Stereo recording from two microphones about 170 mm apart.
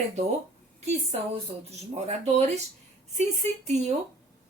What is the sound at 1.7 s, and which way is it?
A woman's voice, 40° right (ahead or behind).